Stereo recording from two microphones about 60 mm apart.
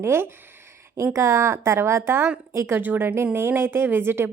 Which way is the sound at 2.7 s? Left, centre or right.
Right.